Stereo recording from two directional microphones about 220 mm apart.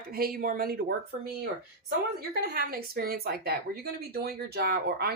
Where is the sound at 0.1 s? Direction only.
40° right (ahead or behind).